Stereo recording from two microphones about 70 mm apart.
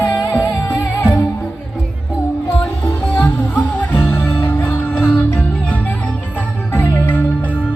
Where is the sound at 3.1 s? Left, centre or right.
Left.